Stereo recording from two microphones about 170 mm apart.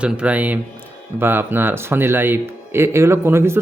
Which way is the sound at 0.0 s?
5° right (ahead or behind).